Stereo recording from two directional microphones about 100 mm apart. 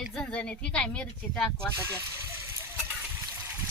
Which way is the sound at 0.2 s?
10° left (ahead or behind).